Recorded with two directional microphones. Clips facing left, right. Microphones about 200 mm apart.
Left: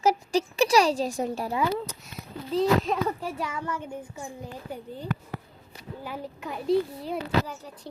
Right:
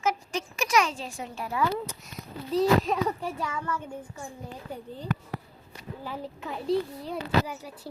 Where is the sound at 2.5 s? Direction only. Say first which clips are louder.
Even; centre (ahead or behind); by 4.2 s 15° left (ahead or behind).